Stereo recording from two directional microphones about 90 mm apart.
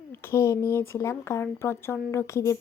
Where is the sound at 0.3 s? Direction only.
35° left (ahead or behind).